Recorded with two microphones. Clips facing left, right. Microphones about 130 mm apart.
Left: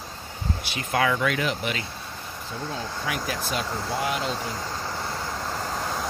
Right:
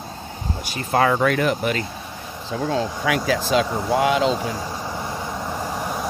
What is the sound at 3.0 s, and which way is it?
Speech, 90° right.